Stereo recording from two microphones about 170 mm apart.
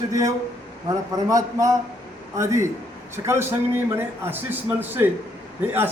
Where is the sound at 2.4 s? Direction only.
15° right (ahead or behind).